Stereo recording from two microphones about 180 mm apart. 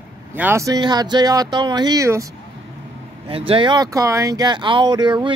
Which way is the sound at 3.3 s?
30° right (ahead or behind).